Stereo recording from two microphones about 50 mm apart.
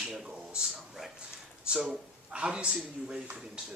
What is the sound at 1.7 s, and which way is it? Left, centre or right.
Speech, centre.